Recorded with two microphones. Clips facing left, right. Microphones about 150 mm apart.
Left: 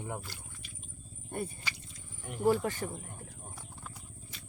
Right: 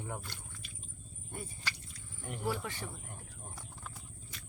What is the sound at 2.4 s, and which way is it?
Speech, 45° left (ahead or behind).